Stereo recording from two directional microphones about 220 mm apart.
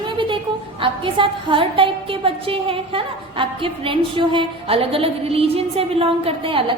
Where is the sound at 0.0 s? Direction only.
20° right (ahead or behind).